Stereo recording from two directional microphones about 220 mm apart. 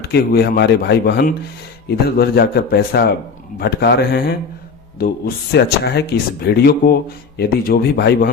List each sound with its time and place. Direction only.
0.0 s speech: 45° left (ahead or behind)